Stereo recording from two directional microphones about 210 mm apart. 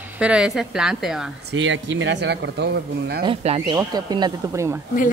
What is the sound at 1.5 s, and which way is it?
Speech, 60° right (ahead or behind).